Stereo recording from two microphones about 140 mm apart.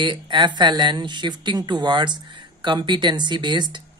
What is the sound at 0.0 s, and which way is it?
Speech, 35° right (ahead or behind).